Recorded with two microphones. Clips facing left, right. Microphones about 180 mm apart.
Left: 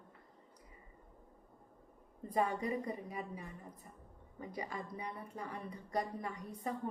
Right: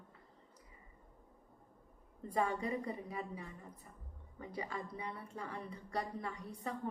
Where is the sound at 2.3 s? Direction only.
15° left (ahead or behind).